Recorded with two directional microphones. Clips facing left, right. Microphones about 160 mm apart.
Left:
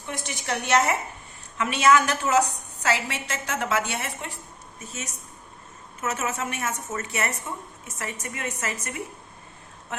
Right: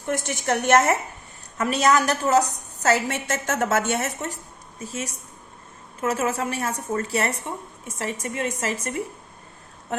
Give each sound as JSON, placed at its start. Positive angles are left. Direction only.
{"t": 0.0, "sound": "a woman's voice", "side_deg": -45}
{"t": 4.8, "sound": "a woman's voice", "side_deg": -30}